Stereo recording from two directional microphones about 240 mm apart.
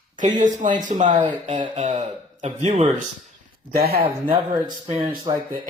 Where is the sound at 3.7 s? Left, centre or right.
Right.